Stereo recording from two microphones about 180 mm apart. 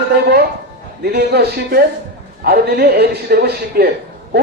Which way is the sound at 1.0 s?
60° right (ahead or behind).